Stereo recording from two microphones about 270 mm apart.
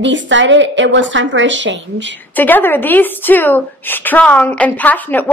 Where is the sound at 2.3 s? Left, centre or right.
Centre.